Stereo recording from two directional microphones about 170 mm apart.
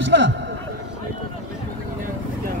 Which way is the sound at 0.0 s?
90° right.